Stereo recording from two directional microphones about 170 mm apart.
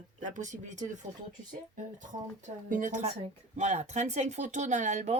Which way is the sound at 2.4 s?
45° right (ahead or behind).